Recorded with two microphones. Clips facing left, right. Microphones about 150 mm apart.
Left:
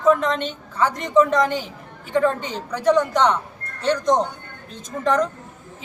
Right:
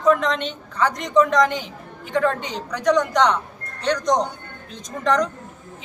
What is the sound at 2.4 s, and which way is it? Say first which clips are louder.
Speech: even; 15° right (ahead or behind).